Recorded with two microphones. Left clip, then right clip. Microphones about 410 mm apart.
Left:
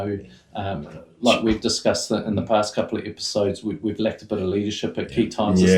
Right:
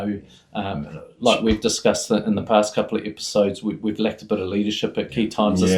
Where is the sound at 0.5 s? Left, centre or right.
Right.